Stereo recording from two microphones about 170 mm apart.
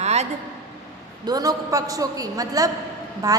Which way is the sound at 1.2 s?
20° right (ahead or behind).